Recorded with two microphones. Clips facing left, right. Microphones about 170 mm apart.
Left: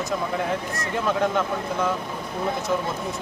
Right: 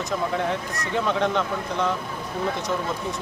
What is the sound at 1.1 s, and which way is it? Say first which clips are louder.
Speech: left 2 dB; 5° left (ahead or behind).